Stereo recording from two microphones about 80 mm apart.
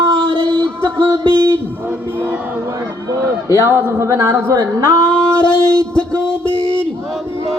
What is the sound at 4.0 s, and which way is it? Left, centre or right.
Speech, right.